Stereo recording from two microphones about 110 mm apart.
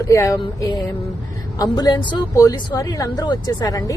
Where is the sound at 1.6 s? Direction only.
35° left (ahead or behind).